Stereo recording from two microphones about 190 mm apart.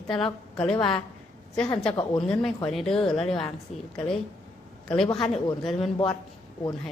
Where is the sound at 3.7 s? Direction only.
35° left (ahead or behind).